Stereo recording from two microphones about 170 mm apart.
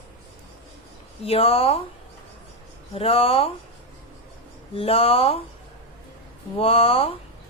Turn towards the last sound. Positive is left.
turn(degrees=35)  # may be behind; listen again after turning